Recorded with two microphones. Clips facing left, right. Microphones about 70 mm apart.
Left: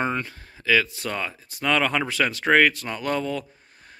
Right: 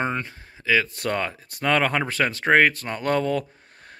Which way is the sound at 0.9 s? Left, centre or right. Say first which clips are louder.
Right 4 dB; right.